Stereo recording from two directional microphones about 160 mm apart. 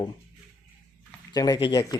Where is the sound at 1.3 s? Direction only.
25° left (ahead or behind).